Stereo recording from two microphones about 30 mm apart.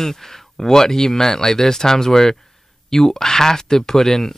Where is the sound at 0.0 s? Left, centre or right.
Centre.